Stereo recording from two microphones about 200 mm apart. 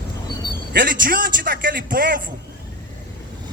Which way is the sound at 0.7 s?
50° right (ahead or behind).